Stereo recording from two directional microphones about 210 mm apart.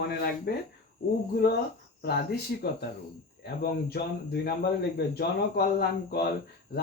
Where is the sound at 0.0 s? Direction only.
50° left (ahead or behind).